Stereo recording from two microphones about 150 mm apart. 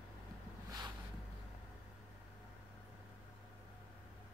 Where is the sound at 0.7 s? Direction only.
25° right (ahead or behind).